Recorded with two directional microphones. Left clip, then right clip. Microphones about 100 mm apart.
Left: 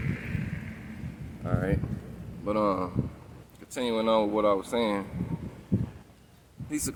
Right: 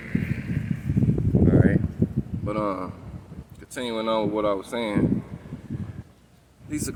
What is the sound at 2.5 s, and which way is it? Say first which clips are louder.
Speech: left 1 dB; 35° left (ahead or behind).